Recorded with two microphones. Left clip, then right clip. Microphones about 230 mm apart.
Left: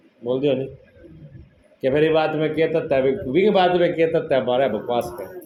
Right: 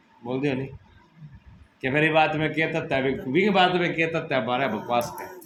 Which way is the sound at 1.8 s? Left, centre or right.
Centre.